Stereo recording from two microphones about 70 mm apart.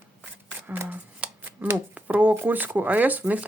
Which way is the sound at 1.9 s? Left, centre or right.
Right.